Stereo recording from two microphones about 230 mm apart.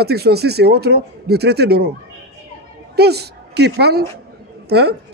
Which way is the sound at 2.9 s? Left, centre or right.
Right.